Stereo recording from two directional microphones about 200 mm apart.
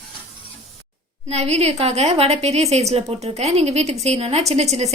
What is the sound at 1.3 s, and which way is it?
A woman's voice, 30° right (ahead or behind).